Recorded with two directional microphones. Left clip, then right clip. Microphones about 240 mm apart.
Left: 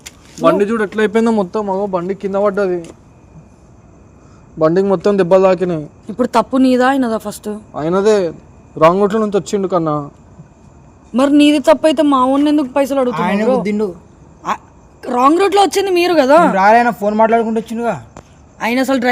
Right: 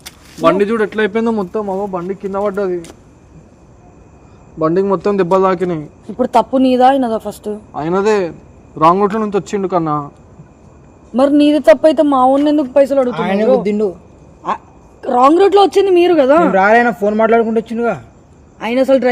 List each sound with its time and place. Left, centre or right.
0.0 s a sound: centre
0.9 s a man's voice: centre
1.1 s a man's voice: left
1.5 s a man's voice: centre
4.6 s a man's voice: left
6.1 s speech: left
7.7 s a man's voice: centre
11.1 s a man's voice: left